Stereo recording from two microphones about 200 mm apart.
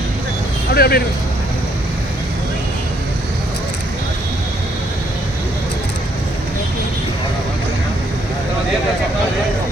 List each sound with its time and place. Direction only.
0.7 s speech: 50° left (ahead or behind)